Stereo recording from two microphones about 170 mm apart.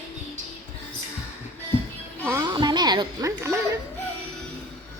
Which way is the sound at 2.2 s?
15° right (ahead or behind).